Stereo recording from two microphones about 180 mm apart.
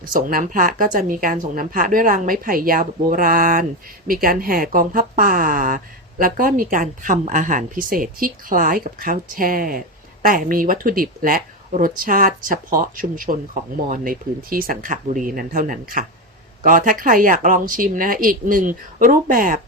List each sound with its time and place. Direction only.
0.1 s speech: 50° right (ahead or behind)